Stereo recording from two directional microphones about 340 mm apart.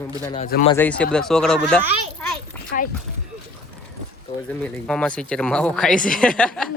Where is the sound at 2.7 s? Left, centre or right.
Left.